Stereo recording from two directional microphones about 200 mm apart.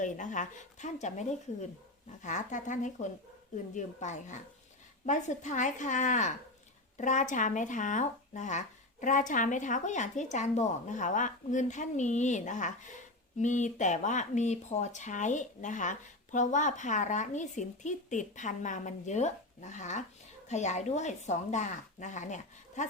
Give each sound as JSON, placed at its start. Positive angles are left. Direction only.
{"t": 0.0, "sound": "speech", "side_deg": 40}